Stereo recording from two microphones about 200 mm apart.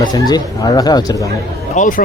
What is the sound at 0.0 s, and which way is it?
Speech, 20° left (ahead or behind).